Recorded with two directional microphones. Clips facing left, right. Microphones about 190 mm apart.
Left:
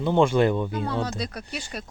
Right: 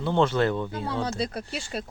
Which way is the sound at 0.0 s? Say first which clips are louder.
Left 3 dB; 15° left (ahead or behind).